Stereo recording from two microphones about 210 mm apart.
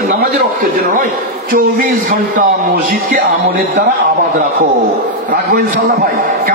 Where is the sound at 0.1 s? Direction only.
40° right (ahead or behind).